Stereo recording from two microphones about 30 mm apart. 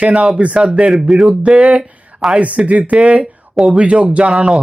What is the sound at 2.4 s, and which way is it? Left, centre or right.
Speech, right.